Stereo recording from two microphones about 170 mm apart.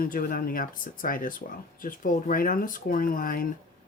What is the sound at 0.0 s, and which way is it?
Speech, 55° left (ahead or behind).